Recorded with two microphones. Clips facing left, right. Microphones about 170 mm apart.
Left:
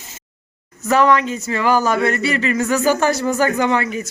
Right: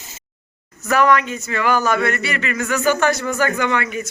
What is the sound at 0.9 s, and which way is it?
Speech, 25° left (ahead or behind).